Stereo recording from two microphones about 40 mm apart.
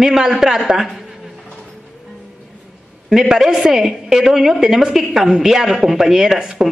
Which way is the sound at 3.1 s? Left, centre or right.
Centre.